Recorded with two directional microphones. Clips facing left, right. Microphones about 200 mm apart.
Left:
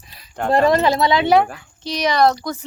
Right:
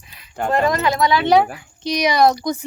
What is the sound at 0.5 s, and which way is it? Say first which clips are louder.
Speech: left 3 dB; 30° left (ahead or behind).